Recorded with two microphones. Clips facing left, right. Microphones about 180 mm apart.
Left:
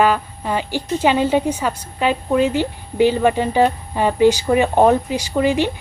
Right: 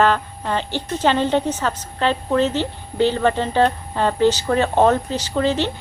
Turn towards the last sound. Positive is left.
turn(degrees=10)  # may be behind; listen again after turning